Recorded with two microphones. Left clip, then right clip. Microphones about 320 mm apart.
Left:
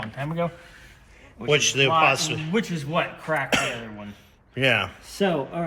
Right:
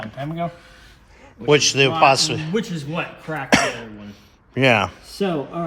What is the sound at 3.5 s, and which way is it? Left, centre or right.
Speech, centre.